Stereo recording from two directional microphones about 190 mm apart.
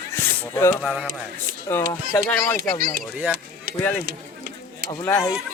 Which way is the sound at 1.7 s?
10° left (ahead or behind).